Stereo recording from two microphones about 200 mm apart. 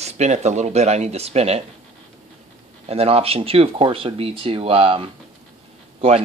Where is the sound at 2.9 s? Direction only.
30° right (ahead or behind).